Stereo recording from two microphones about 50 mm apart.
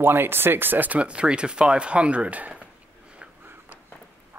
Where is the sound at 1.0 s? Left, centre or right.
Right.